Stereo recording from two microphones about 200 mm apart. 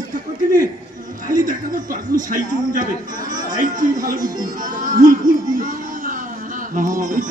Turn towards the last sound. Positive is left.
turn(degrees=-40)  # may be behind; listen again after turning